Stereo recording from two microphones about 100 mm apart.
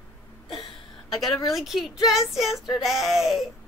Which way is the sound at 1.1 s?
Centre (ahead or behind).